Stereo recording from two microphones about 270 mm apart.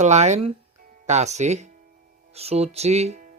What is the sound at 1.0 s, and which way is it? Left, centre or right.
Speech, right.